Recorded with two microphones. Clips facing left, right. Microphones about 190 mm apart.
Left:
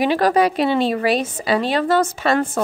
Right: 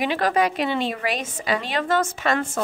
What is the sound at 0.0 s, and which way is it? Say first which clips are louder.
A woman's voice: left 5 dB; 35° left (ahead or behind).